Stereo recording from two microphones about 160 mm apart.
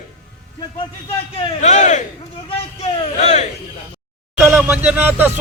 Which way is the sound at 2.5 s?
35° left (ahead or behind).